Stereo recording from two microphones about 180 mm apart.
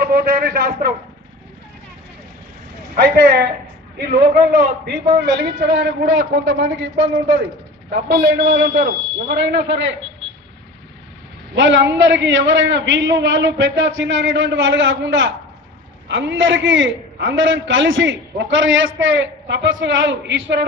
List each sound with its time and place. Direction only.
0.0 s a man's voice: 55° right (ahead or behind)
2.9 s a man's voice: 60° right (ahead or behind); by 7.0 s 80° right
7.9 s a man's voice: 60° right (ahead or behind); by 9.8 s 90° right
11.5 s a man's voice: 90° right
16.0 s a man's voice: 80° right